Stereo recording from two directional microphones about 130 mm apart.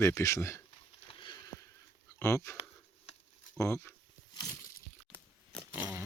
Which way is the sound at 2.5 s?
50° left (ahead or behind).